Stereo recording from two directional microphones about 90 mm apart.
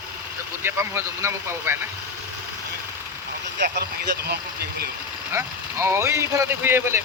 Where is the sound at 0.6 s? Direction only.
30° right (ahead or behind).